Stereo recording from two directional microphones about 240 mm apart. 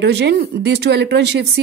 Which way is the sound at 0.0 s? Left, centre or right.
Right.